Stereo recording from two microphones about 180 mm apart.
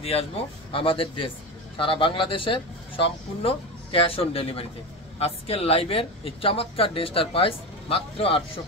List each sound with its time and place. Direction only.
0.0 s a man's voice: 35° left (ahead or behind)